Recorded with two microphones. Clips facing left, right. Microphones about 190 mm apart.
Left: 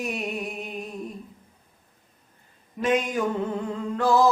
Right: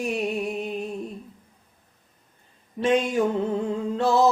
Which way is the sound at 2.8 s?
30° right (ahead or behind).